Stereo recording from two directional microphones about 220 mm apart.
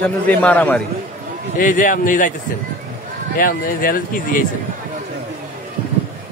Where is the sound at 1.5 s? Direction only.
35° left (ahead or behind).